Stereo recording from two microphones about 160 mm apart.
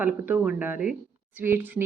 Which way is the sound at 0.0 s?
10° right (ahead or behind).